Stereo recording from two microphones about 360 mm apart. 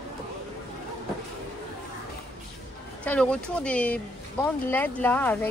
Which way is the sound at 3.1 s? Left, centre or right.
Centre.